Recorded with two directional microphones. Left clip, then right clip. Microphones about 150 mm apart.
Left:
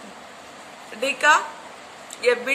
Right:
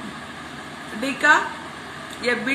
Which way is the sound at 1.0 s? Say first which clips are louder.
Even; 55° left (ahead or behind).